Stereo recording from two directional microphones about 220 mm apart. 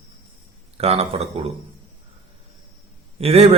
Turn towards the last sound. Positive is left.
turn(degrees=-25)  # may be behind; listen again after turning